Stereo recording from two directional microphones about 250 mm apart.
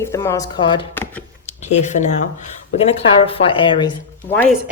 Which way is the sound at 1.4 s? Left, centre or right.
Left.